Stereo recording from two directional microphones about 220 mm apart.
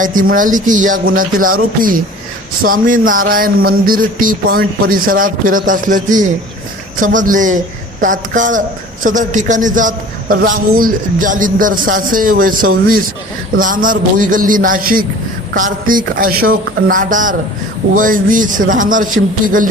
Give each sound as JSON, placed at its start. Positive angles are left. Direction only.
{"t": 0.0, "sound": "a man's voice", "side_deg": -40}
{"t": 2.6, "sound": "a man's voice", "side_deg": -40}